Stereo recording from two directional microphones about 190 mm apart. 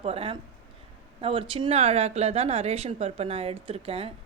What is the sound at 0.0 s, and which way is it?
Speech, 30° right (ahead or behind).